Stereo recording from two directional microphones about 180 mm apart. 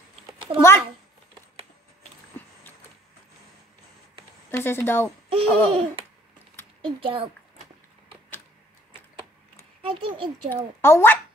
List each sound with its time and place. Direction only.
0.6 s a woman's voice: 15° left (ahead or behind)
4.5 s a woman's voice: 10° left (ahead or behind)
5.3 s laughter: 30° right (ahead or behind)
6.8 s a child's voice: 30° right (ahead or behind)
9.8 s a child's voice: 30° right (ahead or behind)
10.5 s a woman's voice: 10° left (ahead or behind)